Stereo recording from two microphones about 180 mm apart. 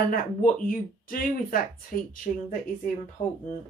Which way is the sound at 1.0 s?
50° left (ahead or behind).